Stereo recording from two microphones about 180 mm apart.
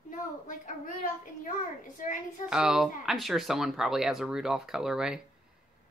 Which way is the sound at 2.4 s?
5° right (ahead or behind).